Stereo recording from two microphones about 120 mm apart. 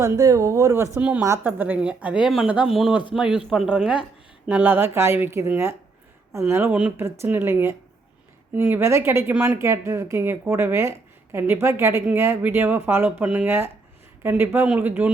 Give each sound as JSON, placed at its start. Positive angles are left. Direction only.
{"t": 0.0, "sound": "speech", "side_deg": -25}
{"t": 0.9, "sound": "speech", "side_deg": -10}